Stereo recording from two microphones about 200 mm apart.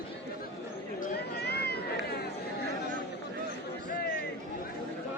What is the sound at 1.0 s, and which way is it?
Cat, 55° left (ahead or behind).